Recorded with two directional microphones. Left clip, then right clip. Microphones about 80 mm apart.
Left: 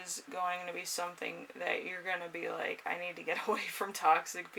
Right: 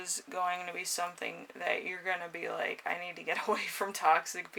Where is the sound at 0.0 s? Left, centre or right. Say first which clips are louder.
Right 3 dB; right.